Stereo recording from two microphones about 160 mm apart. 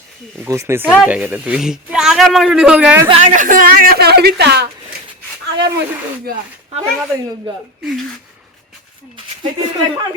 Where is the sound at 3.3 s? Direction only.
55° right (ahead or behind); by 4.6 s 90° right.